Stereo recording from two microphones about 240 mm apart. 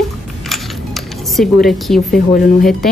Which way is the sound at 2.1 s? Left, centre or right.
Left.